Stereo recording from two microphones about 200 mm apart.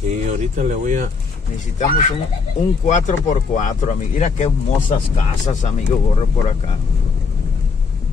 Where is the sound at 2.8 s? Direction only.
35° left (ahead or behind).